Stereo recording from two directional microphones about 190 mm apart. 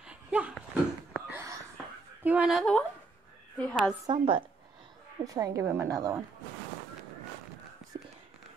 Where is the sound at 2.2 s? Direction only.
5° right (ahead or behind).